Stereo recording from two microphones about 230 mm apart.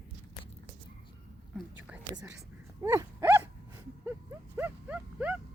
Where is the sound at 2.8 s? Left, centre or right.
Centre.